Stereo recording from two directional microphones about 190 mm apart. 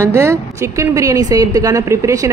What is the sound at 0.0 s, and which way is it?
Speech, 15° right (ahead or behind).